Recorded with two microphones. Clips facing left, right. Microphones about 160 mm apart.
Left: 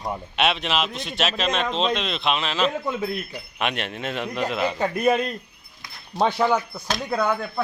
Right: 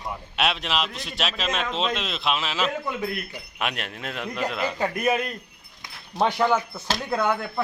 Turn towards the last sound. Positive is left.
turn(degrees=-5)  # may be behind; listen again after turning